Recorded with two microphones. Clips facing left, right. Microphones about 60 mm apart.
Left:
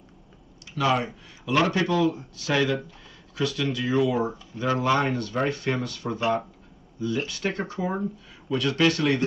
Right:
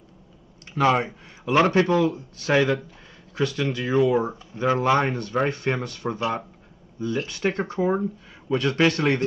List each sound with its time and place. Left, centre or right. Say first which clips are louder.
0.7 s speech: right 3 dB; right
7.2 s speech: right 4 dB; right